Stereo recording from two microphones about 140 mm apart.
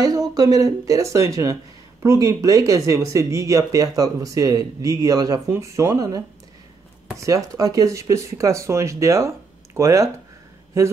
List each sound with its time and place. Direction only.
0.3 s speech: 25° right (ahead or behind)